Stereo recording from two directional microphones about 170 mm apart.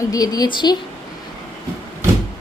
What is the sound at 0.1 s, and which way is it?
Speech, 20° left (ahead or behind).